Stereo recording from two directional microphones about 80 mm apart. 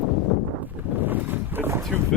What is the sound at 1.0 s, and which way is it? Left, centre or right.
Boat, right.